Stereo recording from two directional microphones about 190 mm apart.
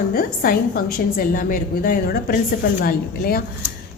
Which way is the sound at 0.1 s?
50° left (ahead or behind).